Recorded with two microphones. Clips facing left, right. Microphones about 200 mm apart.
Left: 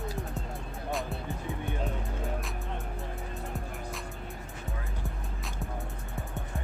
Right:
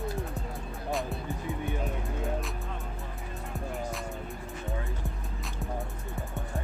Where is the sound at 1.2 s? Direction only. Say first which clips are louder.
Right 2 dB; 15° right (ahead or behind).